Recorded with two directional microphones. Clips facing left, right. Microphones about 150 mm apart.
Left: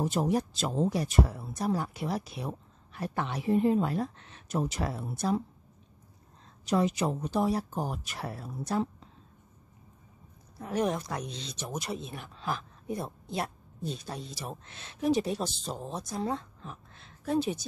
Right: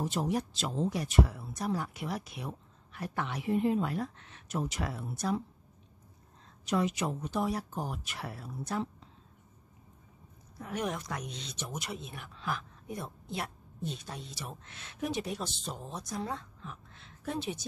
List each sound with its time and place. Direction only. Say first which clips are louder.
0.0 s speech: left 4 dB; 45° left (ahead or behind)
6.6 s speech: left 3 dB; 35° left (ahead or behind)
10.7 s speech: left 5 dB; 35° left (ahead or behind)